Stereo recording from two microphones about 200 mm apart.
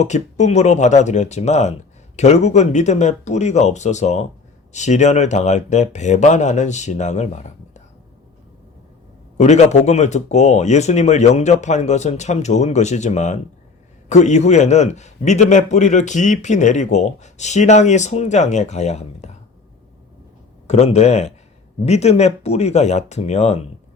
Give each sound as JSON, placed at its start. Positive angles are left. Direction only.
{"t": 0.0, "sound": "a man's voice", "side_deg": 35}
{"t": 9.4, "sound": "a man's voice", "side_deg": 35}
{"t": 20.7, "sound": "a man's voice", "side_deg": 30}